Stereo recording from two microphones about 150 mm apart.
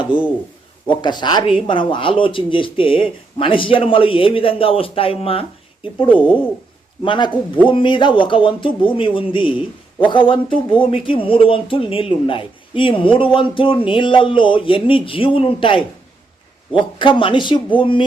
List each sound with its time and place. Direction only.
0.1 s speech: 35° left (ahead or behind)
7.0 s speech: 35° left (ahead or behind)